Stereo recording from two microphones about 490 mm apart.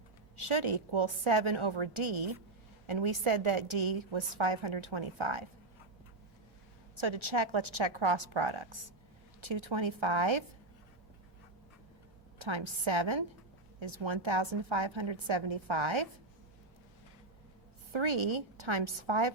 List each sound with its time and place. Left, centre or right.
0.3 s a woman's voice: right
7.0 s a woman's voice: right
12.4 s a woman's voice: right
17.9 s a woman's voice: right